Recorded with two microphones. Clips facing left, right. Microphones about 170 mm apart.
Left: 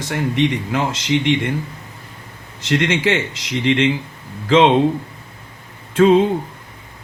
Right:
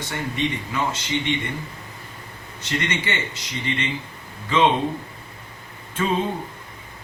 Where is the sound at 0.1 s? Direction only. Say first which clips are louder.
Left 8 dB; 90° left.